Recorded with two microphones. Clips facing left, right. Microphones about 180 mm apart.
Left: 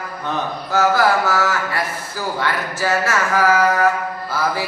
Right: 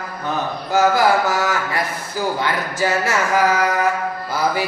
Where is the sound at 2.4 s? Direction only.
15° right (ahead or behind).